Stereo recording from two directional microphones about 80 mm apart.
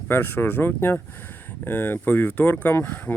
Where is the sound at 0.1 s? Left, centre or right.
Left.